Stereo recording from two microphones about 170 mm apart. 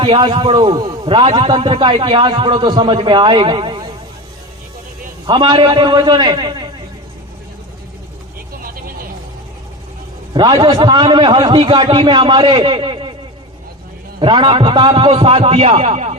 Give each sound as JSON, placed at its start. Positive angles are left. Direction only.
{"t": 0.0, "sound": "a man's voice", "side_deg": -30}
{"t": 5.2, "sound": "a man's voice", "side_deg": -25}
{"t": 8.6, "sound": "vehicle", "side_deg": -60}
{"t": 10.3, "sound": "a man's voice", "side_deg": -30}
{"t": 14.2, "sound": "a man's voice", "side_deg": -30}